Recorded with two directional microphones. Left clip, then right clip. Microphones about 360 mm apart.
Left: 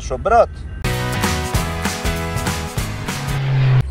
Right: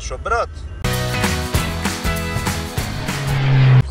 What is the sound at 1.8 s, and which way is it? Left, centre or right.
Music, centre.